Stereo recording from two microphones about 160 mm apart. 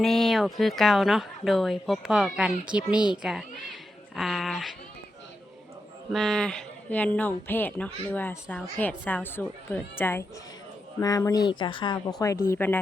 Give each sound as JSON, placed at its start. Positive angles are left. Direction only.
{"t": 0.0, "sound": "a woman's voice", "side_deg": 0}
{"t": 6.1, "sound": "a woman's voice", "side_deg": 0}